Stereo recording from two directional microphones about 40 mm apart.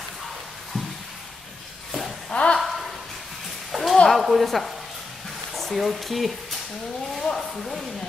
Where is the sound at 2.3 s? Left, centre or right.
Left.